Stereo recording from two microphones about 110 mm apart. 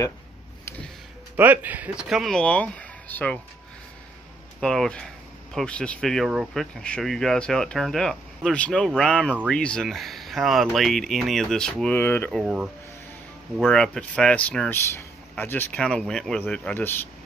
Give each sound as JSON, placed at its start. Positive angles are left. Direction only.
{"t": 1.3, "sound": "speech", "side_deg": -15}
{"t": 4.6, "sound": "speech", "side_deg": 5}
{"t": 12.0, "sound": "speech", "side_deg": 20}
{"t": 12.3, "sound": "speech", "side_deg": -5}